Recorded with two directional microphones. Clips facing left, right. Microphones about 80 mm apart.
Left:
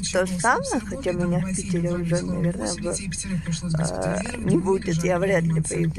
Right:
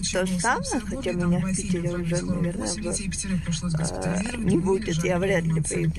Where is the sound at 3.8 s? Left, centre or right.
Left.